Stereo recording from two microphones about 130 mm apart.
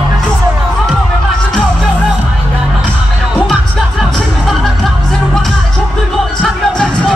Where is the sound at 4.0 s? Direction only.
Centre (ahead or behind).